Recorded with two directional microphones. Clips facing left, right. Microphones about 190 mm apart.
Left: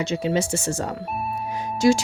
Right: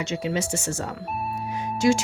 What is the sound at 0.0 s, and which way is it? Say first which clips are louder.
A woman's voice: left 4 dB; 35° left (ahead or behind).